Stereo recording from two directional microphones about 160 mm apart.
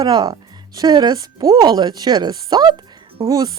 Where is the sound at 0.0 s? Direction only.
25° right (ahead or behind).